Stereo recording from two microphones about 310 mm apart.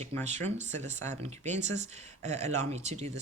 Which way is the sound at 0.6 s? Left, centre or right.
Right.